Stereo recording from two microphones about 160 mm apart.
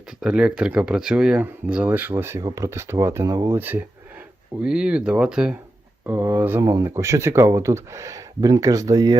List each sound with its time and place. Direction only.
0.2 s speech: 5° right (ahead or behind); by 9.1 s 25° right (ahead or behind)